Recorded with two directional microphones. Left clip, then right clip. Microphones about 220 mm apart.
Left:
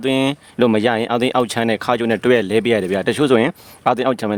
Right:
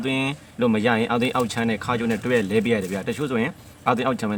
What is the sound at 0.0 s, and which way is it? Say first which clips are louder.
Speech: left 7 dB; 55° left (ahead or behind).